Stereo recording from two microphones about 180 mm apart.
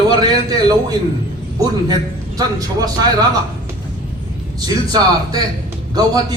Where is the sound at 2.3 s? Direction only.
20° right (ahead or behind).